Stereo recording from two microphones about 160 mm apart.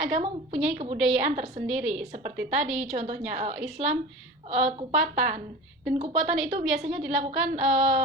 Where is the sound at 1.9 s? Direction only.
45° right (ahead or behind).